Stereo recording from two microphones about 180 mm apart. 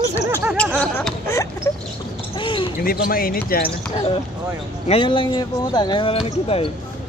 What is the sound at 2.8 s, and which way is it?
Speech, 55° left (ahead or behind).